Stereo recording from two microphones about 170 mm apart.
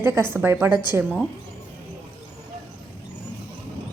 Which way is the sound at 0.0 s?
15° right (ahead or behind).